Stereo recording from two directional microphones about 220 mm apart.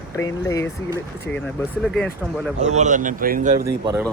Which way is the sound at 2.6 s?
30° right (ahead or behind).